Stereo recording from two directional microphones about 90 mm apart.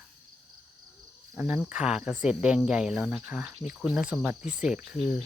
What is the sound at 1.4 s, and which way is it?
Speech, 15° right (ahead or behind).